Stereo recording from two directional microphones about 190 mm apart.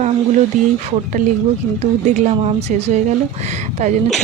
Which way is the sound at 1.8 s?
35° right (ahead or behind).